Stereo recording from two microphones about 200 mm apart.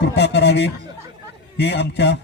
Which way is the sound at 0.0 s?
60° left (ahead or behind).